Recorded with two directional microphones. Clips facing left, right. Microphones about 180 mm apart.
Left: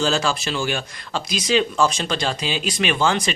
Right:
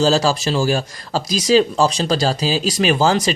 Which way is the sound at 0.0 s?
35° right (ahead or behind).